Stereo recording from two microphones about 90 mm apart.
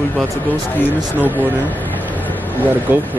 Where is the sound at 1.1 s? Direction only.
20° right (ahead or behind).